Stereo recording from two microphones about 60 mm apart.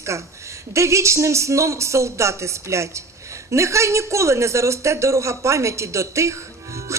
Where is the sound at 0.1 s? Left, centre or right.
Right.